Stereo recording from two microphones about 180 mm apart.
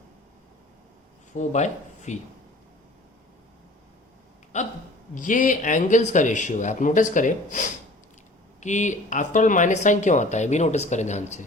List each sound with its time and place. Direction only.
1.4 s speech: 40° left (ahead or behind)
4.5 s speech: 40° left (ahead or behind)